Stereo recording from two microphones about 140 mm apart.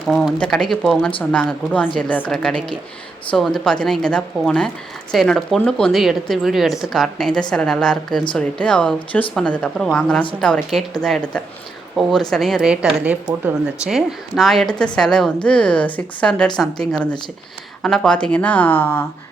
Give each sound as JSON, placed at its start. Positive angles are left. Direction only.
{"t": 0.0, "sound": "a woman's voice", "side_deg": 0}